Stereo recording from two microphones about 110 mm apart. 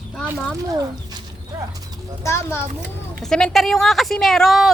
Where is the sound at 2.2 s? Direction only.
25° left (ahead or behind).